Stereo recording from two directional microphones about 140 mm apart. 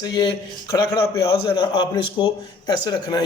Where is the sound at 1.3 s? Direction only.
35° left (ahead or behind).